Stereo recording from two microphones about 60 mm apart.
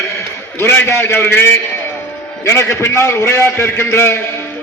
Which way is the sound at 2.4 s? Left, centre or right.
Left.